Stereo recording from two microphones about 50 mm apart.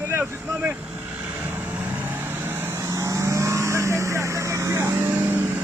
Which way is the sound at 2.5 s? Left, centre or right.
Right.